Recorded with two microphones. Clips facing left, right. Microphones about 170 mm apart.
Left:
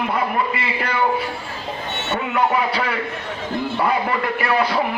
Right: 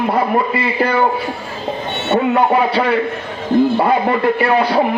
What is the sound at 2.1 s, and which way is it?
A man's voice, 30° right (ahead or behind).